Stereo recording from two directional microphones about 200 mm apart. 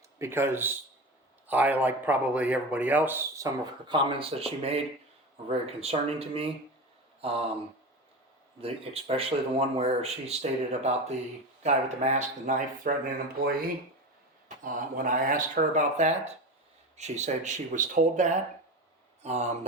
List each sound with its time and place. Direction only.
0.2 s speech: 10° right (ahead or behind); by 6.5 s 30° right (ahead or behind)
7.2 s a sound: 30° right (ahead or behind)
8.6 s speech: 30° right (ahead or behind)